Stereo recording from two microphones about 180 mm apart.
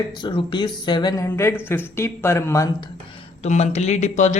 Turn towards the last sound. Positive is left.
turn(degrees=40)  # may be behind; listen again after turning